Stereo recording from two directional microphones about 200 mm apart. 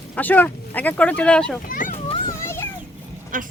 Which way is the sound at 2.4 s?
15° left (ahead or behind).